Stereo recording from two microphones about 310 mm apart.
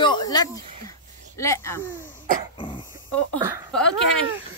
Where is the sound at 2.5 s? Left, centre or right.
Centre.